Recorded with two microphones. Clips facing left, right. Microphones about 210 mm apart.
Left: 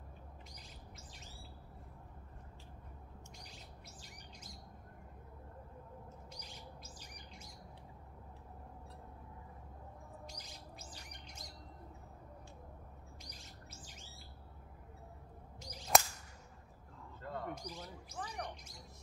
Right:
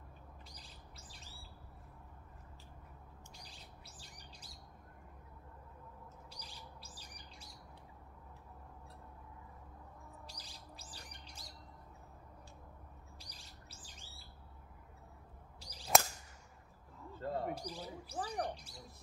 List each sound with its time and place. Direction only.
4.0 s bird: 35° right (ahead or behind)
6.3 s bird: 35° right (ahead or behind)
10.2 s bird: 35° right (ahead or behind)
13.2 s bird: 35° right (ahead or behind)
15.6 s whip: 35° right (ahead or behind)
17.2 s bird: 30° right (ahead or behind)
17.6 s speech: 35° right (ahead or behind)